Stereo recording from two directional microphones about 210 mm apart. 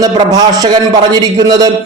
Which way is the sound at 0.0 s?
20° right (ahead or behind).